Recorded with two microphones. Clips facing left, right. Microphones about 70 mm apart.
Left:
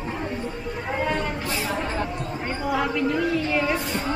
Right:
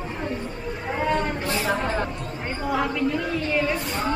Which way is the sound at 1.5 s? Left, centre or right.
Centre.